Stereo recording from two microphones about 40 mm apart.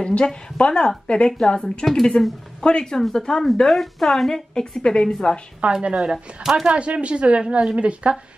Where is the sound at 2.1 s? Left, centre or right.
Left.